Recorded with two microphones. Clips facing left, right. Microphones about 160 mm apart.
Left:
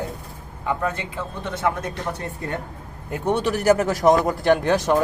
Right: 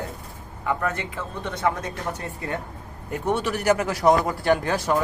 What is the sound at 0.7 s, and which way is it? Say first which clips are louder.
Speech: left 1 dB; 20° left (ahead or behind).